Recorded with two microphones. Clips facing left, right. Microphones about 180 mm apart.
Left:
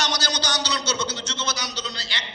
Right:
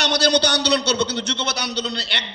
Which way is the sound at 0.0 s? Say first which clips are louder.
Right 9 dB; 65° right (ahead or behind).